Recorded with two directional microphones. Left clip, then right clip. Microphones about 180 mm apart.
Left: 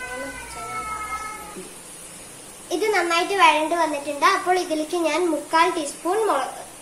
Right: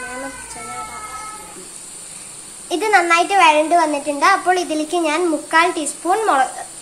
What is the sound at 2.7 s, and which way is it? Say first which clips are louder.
A child's voice: right 6 dB; 65° right (ahead or behind).